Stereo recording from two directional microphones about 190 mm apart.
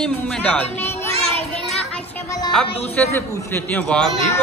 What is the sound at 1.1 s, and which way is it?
Child singing, 30° right (ahead or behind).